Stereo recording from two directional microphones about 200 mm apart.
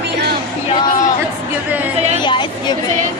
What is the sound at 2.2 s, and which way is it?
Speech, 25° left (ahead or behind).